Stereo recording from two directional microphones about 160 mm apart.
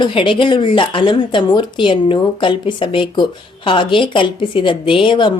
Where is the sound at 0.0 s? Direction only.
30° left (ahead or behind).